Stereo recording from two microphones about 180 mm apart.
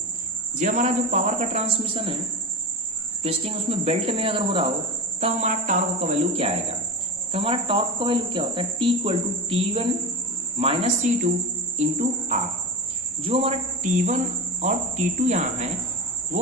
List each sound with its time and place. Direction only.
0.6 s speech: 40° right (ahead or behind)
3.2 s speech: 30° right (ahead or behind)
5.2 s speech: 40° right (ahead or behind)
13.2 s speech: 30° right (ahead or behind)
14.6 s speech: 40° right (ahead or behind)